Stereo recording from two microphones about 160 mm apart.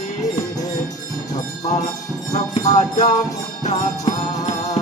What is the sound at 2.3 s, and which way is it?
Music, 45° left (ahead or behind).